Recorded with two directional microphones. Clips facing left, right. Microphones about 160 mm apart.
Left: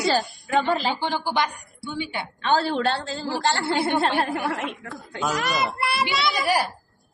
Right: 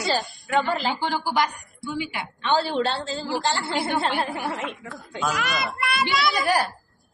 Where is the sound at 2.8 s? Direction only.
50° left (ahead or behind).